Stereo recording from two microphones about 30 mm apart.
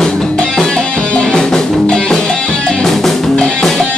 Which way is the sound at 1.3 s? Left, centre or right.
Left.